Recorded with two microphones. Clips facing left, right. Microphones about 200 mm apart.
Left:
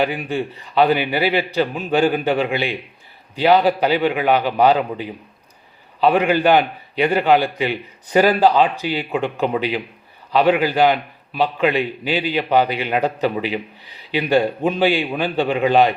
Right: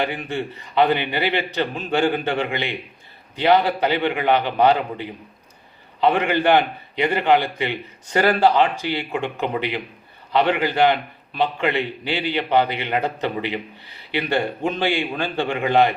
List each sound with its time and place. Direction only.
0.0 s a man's voice: 10° left (ahead or behind)